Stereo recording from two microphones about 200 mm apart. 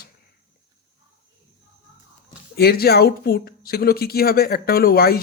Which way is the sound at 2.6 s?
50° left (ahead or behind).